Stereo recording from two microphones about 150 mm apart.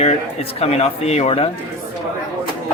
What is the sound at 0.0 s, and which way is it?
Speech, 45° left (ahead or behind).